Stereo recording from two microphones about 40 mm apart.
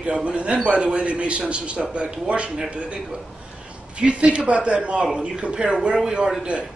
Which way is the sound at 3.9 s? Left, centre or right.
Right.